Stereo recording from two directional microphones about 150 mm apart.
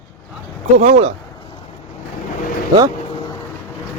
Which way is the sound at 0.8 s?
45° right (ahead or behind).